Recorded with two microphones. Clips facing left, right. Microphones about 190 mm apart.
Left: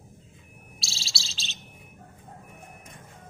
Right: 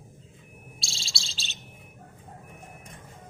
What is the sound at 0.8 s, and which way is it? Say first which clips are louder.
Bird: left 2 dB; 5° left (ahead or behind).